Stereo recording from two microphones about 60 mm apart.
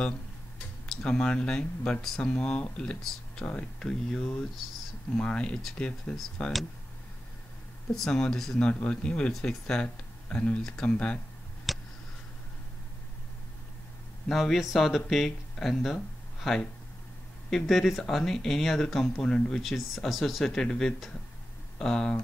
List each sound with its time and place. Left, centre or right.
1.0 s speech: centre
7.9 s speech: centre
8.6 s speech: centre
11.7 s a sound: centre
14.3 s speech: centre
19.6 s speech: centre